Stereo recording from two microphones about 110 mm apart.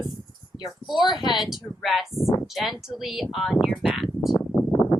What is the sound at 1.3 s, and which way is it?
Speech, 5° right (ahead or behind).